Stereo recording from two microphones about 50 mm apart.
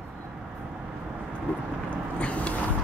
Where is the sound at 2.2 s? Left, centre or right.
Left.